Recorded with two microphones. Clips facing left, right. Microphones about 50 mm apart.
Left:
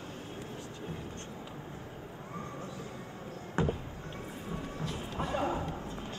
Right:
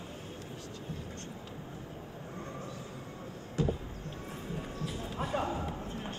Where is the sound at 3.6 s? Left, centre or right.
Left.